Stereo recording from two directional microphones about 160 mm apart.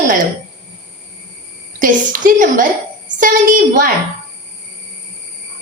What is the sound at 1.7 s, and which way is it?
A woman's voice, 55° right (ahead or behind).